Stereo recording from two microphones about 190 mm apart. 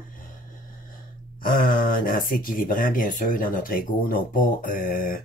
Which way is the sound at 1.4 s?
45° left (ahead or behind).